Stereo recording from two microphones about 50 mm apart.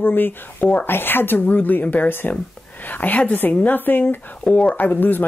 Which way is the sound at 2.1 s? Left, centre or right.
Left.